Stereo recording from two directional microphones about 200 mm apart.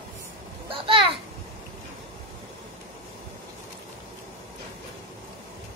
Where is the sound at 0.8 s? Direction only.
25° right (ahead or behind).